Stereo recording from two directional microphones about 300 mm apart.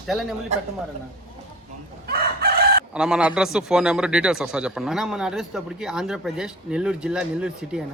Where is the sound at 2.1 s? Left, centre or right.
Right.